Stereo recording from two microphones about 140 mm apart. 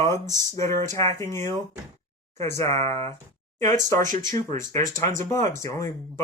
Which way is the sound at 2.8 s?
45° right (ahead or behind).